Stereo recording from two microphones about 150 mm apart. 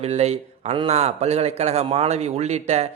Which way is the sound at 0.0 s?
45° right (ahead or behind).